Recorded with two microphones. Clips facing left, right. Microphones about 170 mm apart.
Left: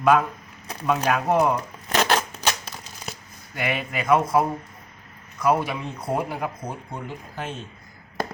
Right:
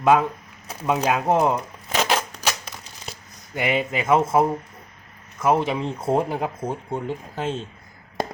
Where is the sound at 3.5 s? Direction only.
20° right (ahead or behind).